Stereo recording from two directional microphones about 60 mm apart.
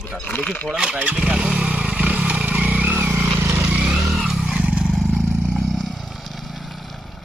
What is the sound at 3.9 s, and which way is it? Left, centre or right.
Vehicle, centre.